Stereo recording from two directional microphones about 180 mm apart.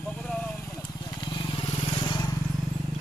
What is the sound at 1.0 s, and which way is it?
Vehicle, 25° left (ahead or behind).